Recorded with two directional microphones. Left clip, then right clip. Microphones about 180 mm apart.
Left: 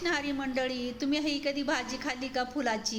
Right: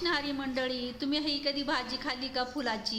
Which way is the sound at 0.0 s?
5° left (ahead or behind).